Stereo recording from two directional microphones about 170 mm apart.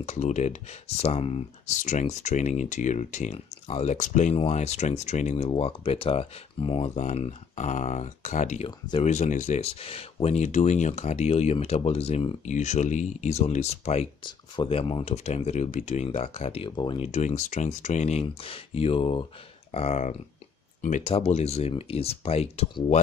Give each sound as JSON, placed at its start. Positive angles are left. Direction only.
{"t": 0.0, "sound": "speech", "side_deg": 45}
{"t": 8.6, "sound": "speech", "side_deg": 25}
{"t": 9.0, "sound": "speech", "side_deg": 45}
{"t": 14.2, "sound": "speech", "side_deg": 30}